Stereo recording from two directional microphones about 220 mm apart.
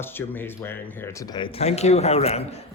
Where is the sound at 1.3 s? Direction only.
30° left (ahead or behind).